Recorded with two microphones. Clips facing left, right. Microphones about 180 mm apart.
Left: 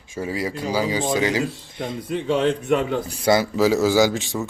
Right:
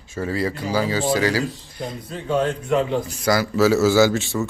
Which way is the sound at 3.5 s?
15° left (ahead or behind).